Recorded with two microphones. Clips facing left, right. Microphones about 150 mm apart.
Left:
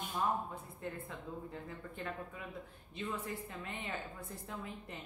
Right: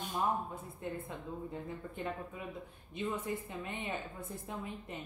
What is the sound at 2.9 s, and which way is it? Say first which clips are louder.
A woman's voice: right 4 dB; 20° right (ahead or behind).